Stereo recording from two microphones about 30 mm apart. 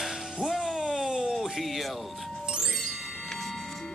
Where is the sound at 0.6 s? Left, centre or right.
Centre.